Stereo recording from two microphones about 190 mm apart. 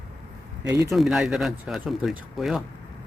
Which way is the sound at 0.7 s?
15° right (ahead or behind).